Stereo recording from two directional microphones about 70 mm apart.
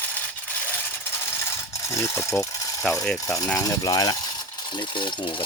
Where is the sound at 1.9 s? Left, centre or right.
Left.